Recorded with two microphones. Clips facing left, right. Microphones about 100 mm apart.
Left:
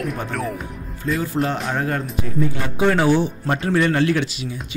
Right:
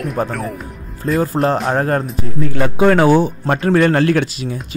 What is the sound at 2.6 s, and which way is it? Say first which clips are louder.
A man's voice: right 8 dB; 55° right (ahead or behind).